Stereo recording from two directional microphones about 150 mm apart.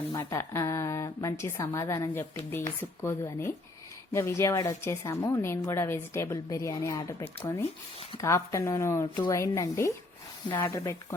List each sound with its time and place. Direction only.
0.1 s a woman's voice: 20° left (ahead or behind)